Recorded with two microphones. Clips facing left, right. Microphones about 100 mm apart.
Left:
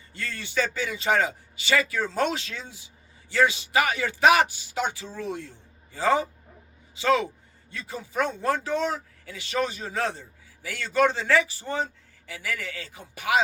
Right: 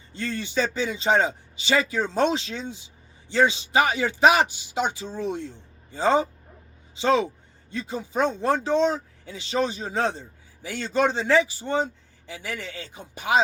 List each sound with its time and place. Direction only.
0.1 s speech: 25° right (ahead or behind)